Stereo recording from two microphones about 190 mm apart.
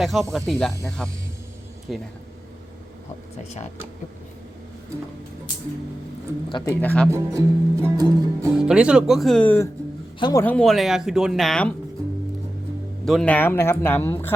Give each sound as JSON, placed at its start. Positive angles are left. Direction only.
{"t": 0.0, "sound": "speech", "side_deg": 0}
{"t": 6.7, "sound": "speech", "side_deg": 5}
{"t": 7.1, "sound": "music", "side_deg": -15}
{"t": 8.5, "sound": "speech", "side_deg": -5}
{"t": 10.2, "sound": "a man's voice", "side_deg": 25}
{"t": 10.4, "sound": "speech", "side_deg": 5}
{"t": 13.1, "sound": "speech", "side_deg": 5}